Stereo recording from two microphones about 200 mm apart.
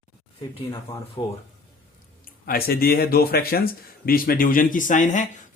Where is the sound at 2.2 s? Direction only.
50° left (ahead or behind).